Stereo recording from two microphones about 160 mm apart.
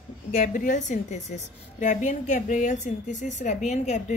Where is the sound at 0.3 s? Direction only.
55° left (ahead or behind).